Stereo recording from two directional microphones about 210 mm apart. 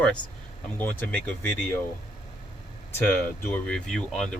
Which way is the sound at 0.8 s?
10° left (ahead or behind).